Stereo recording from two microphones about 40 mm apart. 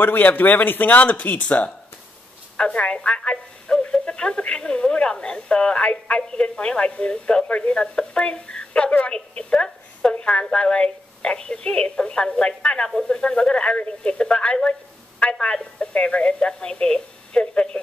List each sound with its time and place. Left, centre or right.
0.0 s a man's voice: left
2.5 s telephone: left
3.9 s a woman's voice: left